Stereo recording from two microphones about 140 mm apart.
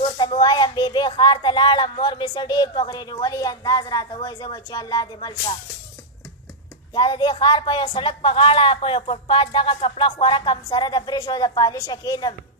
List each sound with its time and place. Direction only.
0.4 s a woman's voice: 30° left (ahead or behind)
6.9 s a woman's voice: 30° left (ahead or behind)